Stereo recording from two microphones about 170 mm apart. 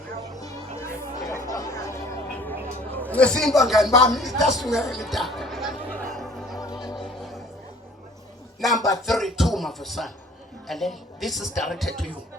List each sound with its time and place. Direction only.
0.8 s a sound: 15° left (ahead or behind)
1.5 s chatter: 20° left (ahead or behind)
2.9 s a man's voice: 10° left (ahead or behind)
6.0 s music: centre (ahead or behind)
8.6 s speech: centre (ahead or behind)